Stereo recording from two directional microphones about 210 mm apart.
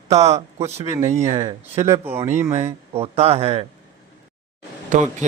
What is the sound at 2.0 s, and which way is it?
Speech, 10° right (ahead or behind).